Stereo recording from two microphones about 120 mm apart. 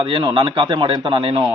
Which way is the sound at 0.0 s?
40° right (ahead or behind).